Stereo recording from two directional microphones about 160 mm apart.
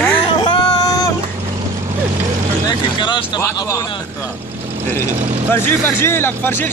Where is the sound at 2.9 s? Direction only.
30° left (ahead or behind).